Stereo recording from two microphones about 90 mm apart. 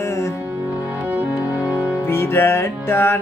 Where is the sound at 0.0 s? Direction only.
30° left (ahead or behind).